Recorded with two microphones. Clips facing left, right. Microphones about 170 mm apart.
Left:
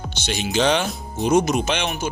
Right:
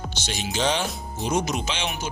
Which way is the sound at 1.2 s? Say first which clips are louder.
Left 7 dB; 55° left (ahead or behind).